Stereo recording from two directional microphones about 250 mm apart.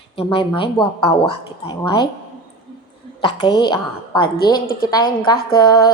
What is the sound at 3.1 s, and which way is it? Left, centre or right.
Speech, centre.